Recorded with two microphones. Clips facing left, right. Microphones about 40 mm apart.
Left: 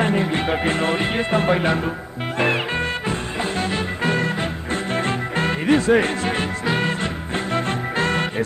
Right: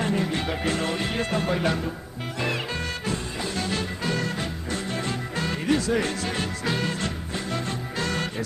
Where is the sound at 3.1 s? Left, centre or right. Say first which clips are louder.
Left 5 dB; left.